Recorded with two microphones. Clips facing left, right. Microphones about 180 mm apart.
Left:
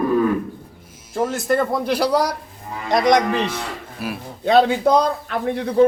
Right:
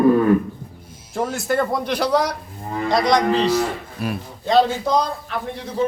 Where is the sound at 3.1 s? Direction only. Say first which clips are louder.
Right 1 dB; 55° left (ahead or behind).